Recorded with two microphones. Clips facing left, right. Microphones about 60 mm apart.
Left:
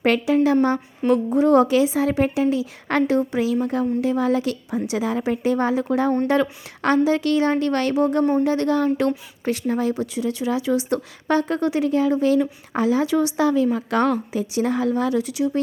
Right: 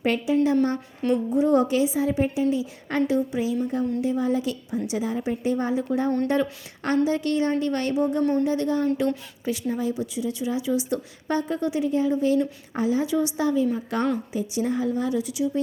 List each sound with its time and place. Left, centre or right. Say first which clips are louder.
0.0 s a woman's voice: left 4 dB; left
0.4 s a woman's voice: left 4 dB; left
1.3 s a woman's voice: left 4 dB; left
8.2 s speech: left 3 dB; centre
8.4 s a woman's voice: left 4 dB; left
9.0 s a woman's voice: left 3 dB; left